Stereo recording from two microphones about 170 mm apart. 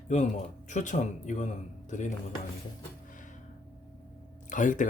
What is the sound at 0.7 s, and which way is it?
Speech, 45° left (ahead or behind).